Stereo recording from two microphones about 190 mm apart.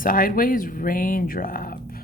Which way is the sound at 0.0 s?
50° left (ahead or behind).